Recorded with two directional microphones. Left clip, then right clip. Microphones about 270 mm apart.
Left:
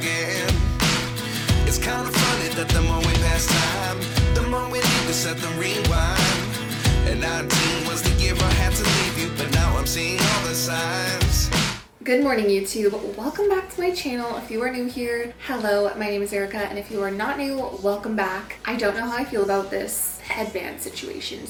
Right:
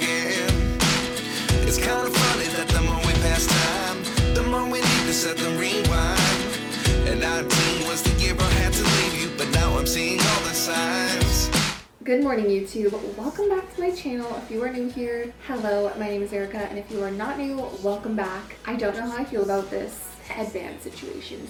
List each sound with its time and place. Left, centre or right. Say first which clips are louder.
0.1 s music: even; centre
15.5 s a woman's voice: left 3 dB; centre
16.0 s music: left 3 dB; centre
18.2 s a woman's voice: left 4 dB; centre